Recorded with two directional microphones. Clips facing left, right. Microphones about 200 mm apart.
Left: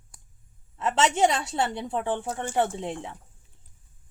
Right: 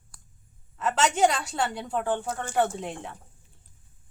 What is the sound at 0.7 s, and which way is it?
A woman's voice, 25° left (ahead or behind).